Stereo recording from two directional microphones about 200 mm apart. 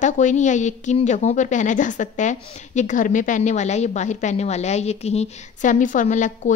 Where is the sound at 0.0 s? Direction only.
40° left (ahead or behind).